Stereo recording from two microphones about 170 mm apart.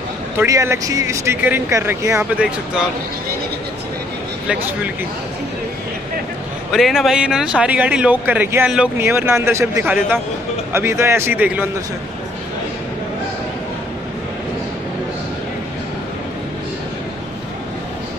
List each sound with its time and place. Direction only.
0.4 s speech: 15° right (ahead or behind)
4.5 s speech: 10° right (ahead or behind)
6.7 s speech: centre (ahead or behind)